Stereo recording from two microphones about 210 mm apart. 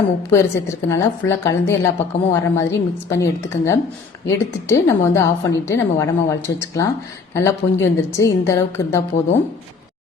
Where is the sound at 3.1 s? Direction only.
15° left (ahead or behind).